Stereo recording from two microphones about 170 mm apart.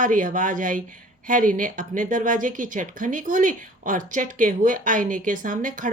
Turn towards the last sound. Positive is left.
turn(degrees=-50)  # may be behind; listen again after turning